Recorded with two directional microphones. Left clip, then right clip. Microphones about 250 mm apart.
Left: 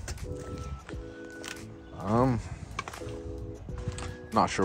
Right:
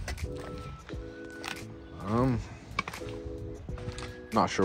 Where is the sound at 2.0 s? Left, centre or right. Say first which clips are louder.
Left 3 dB; centre.